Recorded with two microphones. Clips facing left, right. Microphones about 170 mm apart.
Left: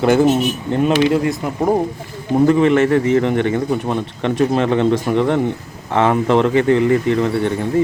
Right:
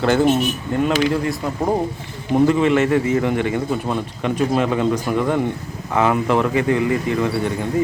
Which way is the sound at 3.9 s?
25° left (ahead or behind).